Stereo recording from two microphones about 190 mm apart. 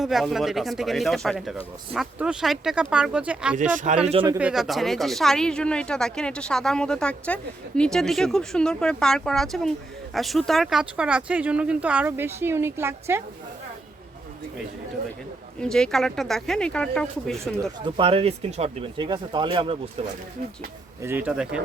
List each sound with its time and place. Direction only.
0.0 s speech: centre (ahead or behind)
3.6 s speech: 40° right (ahead or behind)
3.9 s speech: 30° right (ahead or behind)
4.4 s speech: 5° right (ahead or behind)
15.6 s speech: 5° left (ahead or behind)
17.6 s speech: 25° right (ahead or behind)
21.0 s speech: 10° right (ahead or behind)